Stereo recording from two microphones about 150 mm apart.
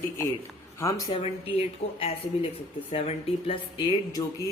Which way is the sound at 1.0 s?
40° left (ahead or behind).